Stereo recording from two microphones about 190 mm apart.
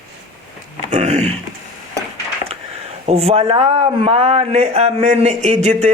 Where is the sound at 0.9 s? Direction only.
40° right (ahead or behind).